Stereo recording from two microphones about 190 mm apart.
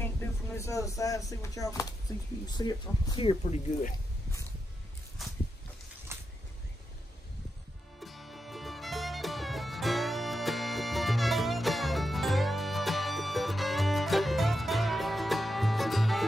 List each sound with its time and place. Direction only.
0.0 s speech: 15° left (ahead or behind); by 3.6 s 30° left (ahead or behind)
6.1 s a sound: 15° right (ahead or behind)
8.0 s music: centre (ahead or behind)